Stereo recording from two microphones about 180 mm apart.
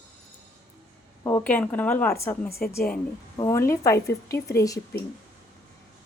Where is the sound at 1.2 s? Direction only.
15° left (ahead or behind).